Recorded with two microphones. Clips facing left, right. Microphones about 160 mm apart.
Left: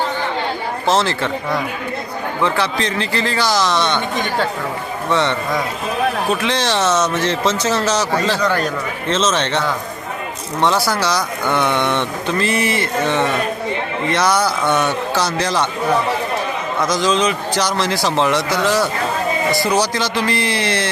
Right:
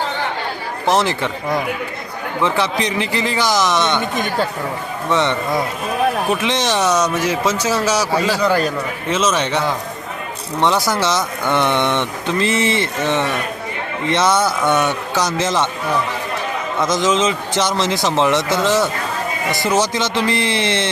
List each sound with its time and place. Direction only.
0.9 s speech: 15° right (ahead or behind)
5.1 s a man's voice: 15° right (ahead or behind)
16.8 s a man's voice: 20° right (ahead or behind)